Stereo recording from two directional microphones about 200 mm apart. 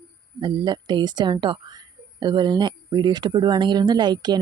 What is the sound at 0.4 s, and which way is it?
Speech, 20° right (ahead or behind).